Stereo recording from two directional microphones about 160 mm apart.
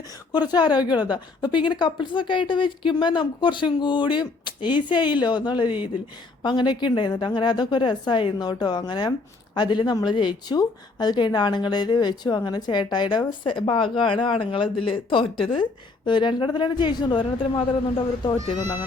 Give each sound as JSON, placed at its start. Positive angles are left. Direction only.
{"t": 0.3, "sound": "speech", "side_deg": 25}